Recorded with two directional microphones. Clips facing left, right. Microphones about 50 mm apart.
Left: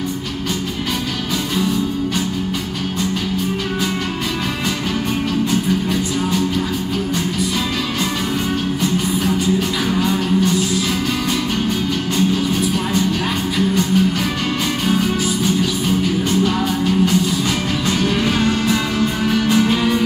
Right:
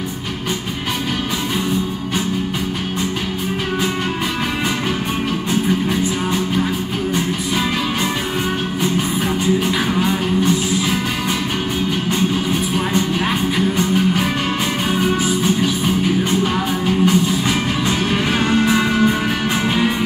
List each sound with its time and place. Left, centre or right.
9.8 s music: centre
13.7 s music: right
16.3 s music: centre